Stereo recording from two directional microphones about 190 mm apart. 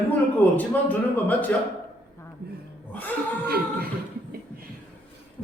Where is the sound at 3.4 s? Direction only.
55° right (ahead or behind).